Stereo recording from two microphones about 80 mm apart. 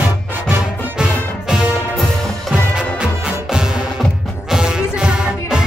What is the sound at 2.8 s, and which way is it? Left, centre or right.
Music, centre.